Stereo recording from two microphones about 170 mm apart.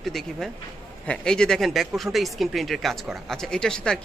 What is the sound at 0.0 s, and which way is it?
Speech, centre (ahead or behind).